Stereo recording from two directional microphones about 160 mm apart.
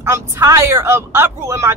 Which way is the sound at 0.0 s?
20° right (ahead or behind).